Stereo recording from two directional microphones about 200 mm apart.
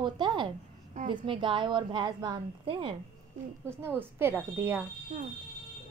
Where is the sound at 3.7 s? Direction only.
10° right (ahead or behind).